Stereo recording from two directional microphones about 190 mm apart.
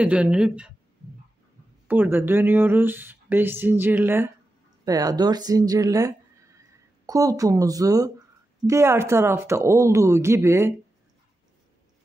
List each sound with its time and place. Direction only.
0.0 s speech: 5° right (ahead or behind)
1.9 s speech: 10° right (ahead or behind)